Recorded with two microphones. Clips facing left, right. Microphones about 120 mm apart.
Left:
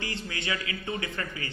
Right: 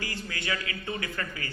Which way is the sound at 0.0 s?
25° left (ahead or behind).